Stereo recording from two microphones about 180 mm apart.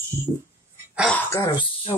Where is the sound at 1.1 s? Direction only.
10° left (ahead or behind); by 1.9 s 30° left (ahead or behind).